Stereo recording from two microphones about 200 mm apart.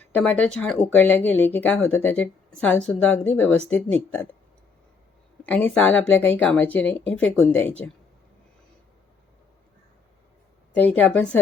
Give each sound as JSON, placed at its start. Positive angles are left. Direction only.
{"t": 0.0, "sound": "speech", "side_deg": 5}
{"t": 5.4, "sound": "speech", "side_deg": 10}
{"t": 10.8, "sound": "speech", "side_deg": 10}